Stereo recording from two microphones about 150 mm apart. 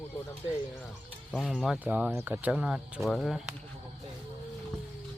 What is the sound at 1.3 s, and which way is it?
Speech, 5° right (ahead or behind).